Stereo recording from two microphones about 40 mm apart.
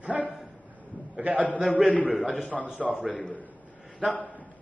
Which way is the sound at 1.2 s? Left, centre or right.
Right.